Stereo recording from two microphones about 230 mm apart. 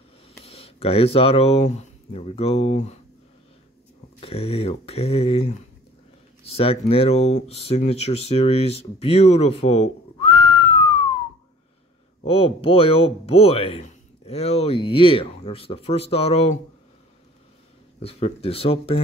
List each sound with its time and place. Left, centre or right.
0.5 s speech: left
4.2 s speech: left
12.3 s speech: left
18.0 s speech: left